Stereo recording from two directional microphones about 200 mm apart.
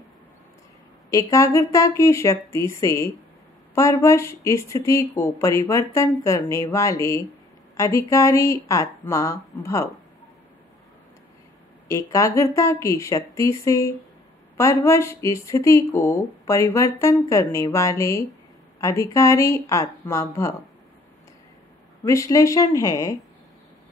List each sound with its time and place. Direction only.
1.1 s speech: 15° left (ahead or behind)
11.9 s speech: 15° left (ahead or behind)
22.0 s speech: 15° left (ahead or behind)